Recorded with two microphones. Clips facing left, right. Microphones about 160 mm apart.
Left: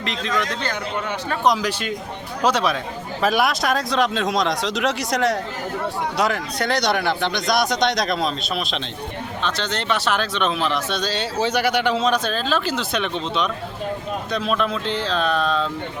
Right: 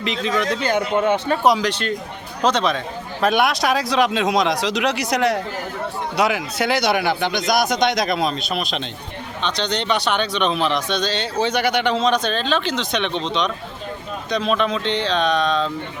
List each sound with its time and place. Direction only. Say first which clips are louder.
0.0 s speech: right 3 dB; centre (ahead or behind)
0.6 s a man's voice: right 7 dB; 20° right (ahead or behind)
1.5 s speech: right 1 dB; 5° left (ahead or behind)